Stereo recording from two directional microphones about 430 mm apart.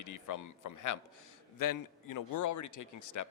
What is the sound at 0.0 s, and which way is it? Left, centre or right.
A man's voice, left.